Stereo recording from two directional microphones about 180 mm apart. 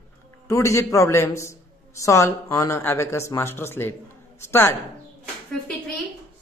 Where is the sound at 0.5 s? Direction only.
15° left (ahead or behind).